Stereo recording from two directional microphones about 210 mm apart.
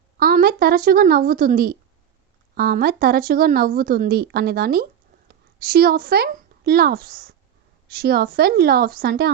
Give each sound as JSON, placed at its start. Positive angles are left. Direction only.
{"t": 0.2, "sound": "speech", "side_deg": -45}